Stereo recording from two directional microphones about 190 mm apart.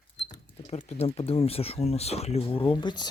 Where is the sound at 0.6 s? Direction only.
35° left (ahead or behind).